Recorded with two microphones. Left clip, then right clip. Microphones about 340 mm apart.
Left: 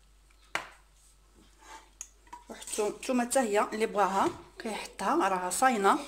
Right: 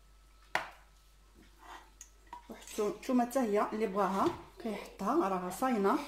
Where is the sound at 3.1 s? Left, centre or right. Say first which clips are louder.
Left 3 dB; left.